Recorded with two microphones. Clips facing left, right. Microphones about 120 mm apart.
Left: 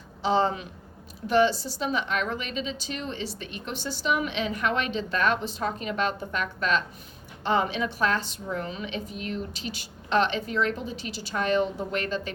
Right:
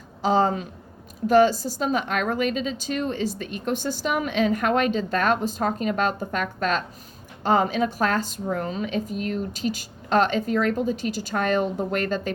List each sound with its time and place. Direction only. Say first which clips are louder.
0.2 s a woman's voice: right 3 dB; 45° right (ahead or behind)